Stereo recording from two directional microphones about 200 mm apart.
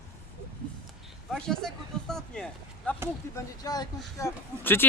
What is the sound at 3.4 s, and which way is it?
Speech, 20° left (ahead or behind).